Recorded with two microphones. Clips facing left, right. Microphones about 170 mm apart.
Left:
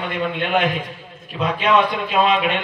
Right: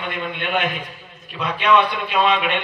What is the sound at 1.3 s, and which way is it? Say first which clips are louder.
A man's voice: even; 35° left (ahead or behind).